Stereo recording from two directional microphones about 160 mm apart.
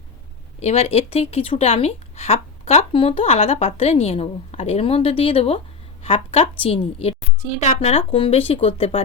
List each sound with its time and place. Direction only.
0.6 s speech: 40° left (ahead or behind)